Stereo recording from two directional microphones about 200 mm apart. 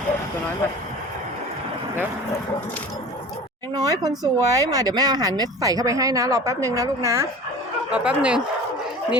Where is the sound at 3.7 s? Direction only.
20° right (ahead or behind).